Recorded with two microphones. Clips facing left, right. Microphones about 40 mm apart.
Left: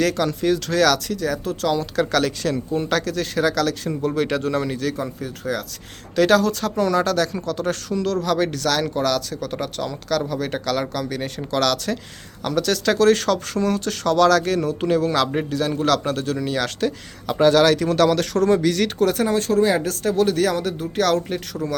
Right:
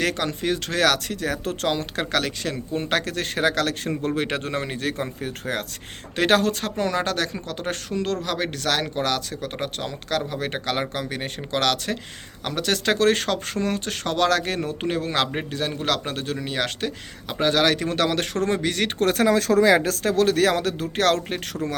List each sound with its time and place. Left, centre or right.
0.0 s speech: right
2.1 s speech: right
2.7 s speech: right
18.9 s speech: right
19.2 s speech: right